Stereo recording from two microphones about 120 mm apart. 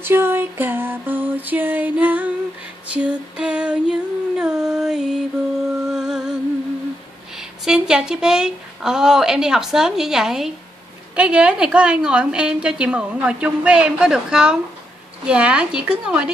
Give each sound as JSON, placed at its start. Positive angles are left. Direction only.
{"t": 0.0, "sound": "a sound", "side_deg": -20}
{"t": 2.9, "sound": "female singing", "side_deg": -10}
{"t": 5.7, "sound": "music", "side_deg": -5}
{"t": 7.3, "sound": "a woman's voice", "side_deg": -5}